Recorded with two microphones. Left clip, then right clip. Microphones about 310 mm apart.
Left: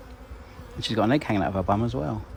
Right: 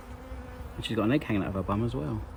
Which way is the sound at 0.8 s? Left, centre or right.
Centre.